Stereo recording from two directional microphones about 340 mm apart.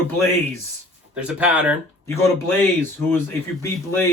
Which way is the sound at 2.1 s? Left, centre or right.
Centre.